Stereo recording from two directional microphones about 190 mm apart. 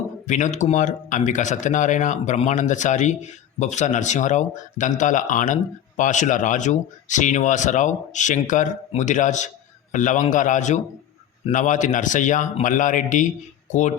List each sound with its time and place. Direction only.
0.3 s a man's voice: 40° left (ahead or behind)